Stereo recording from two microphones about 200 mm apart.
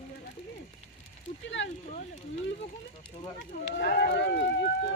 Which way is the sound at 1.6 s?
65° left (ahead or behind).